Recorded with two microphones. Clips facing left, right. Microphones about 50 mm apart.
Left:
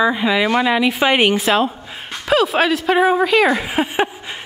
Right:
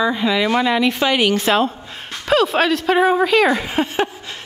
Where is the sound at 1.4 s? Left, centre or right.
Centre.